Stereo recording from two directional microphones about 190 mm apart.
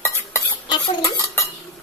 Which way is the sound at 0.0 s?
15° left (ahead or behind).